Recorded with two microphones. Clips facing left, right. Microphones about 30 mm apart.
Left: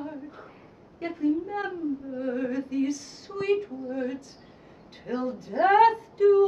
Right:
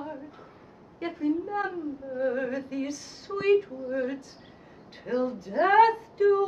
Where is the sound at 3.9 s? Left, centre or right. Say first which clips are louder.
Right 2 dB; centre.